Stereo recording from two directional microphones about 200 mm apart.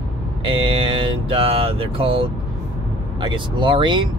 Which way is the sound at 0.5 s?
25° right (ahead or behind).